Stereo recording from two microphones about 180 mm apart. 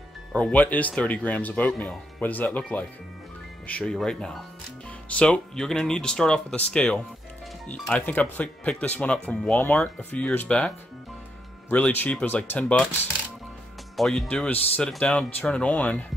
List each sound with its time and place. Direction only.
0.3 s speech: 5° left (ahead or behind)
11.7 s speech: 10° left (ahead or behind)
13.9 s speech: centre (ahead or behind)